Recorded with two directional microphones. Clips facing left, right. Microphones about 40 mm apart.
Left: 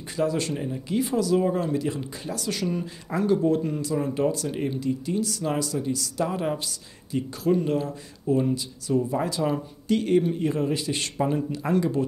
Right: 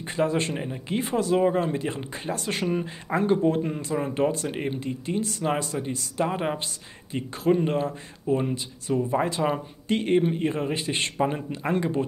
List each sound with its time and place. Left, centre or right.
0.1 s speech: right